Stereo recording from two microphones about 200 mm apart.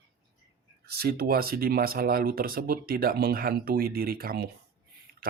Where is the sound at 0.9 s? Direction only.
50° right (ahead or behind).